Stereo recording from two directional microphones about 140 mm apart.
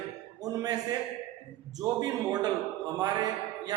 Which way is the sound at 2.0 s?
30° right (ahead or behind).